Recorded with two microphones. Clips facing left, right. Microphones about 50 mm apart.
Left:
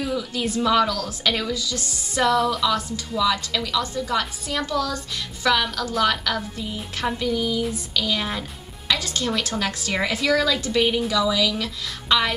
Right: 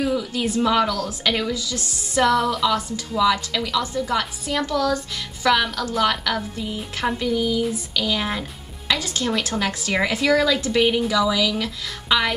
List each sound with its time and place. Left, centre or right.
0.0 s a sound: centre
0.6 s a woman's voice: centre
2.2 s speech: centre
3.2 s a woman's voice: centre
4.6 s speech: right
5.4 s a woman's voice: centre